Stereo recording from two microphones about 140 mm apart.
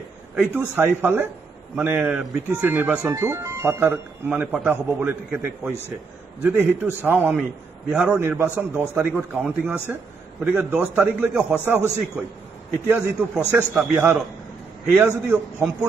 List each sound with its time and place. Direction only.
0.4 s a man's voice: 15° right (ahead or behind)